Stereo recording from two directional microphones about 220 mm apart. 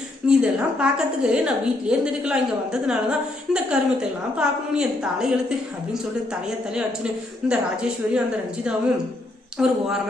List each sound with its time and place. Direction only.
0.3 s a woman's voice: 5° right (ahead or behind)
9.6 s a woman's voice: 5° right (ahead or behind)